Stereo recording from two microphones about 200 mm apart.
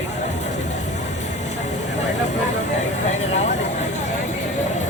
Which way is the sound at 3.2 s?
35° left (ahead or behind).